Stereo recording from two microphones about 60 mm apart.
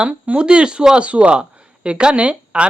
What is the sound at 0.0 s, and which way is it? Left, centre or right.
A woman's voice, centre.